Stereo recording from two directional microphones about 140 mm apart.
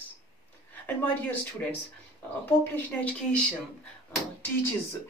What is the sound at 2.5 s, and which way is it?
Speech, 15° left (ahead or behind).